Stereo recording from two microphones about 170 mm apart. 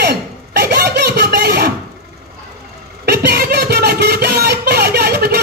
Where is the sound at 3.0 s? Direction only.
70° right (ahead or behind).